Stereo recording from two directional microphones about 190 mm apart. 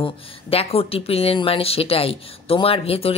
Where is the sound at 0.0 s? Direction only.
30° left (ahead or behind).